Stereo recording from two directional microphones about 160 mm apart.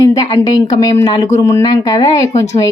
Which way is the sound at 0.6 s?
25° left (ahead or behind).